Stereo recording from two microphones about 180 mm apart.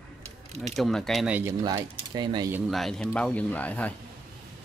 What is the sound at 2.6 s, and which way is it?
Speech, centre (ahead or behind).